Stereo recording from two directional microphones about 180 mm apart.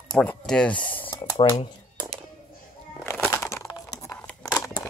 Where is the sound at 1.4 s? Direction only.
30° left (ahead or behind).